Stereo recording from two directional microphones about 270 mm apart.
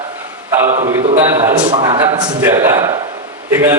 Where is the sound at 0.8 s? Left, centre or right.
Centre.